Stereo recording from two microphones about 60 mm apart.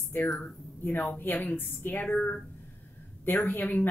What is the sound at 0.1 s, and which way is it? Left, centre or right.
A woman's voice, left.